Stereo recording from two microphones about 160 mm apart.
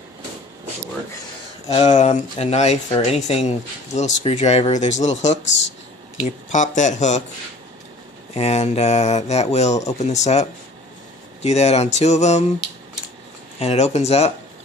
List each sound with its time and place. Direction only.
1.7 s speech: 45° left (ahead or behind)
8.4 s speech: 40° left (ahead or behind)
11.4 s speech: 45° left (ahead or behind)
13.6 s speech: 40° left (ahead or behind)